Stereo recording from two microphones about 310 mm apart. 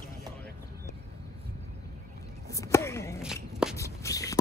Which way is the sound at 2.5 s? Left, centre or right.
Centre.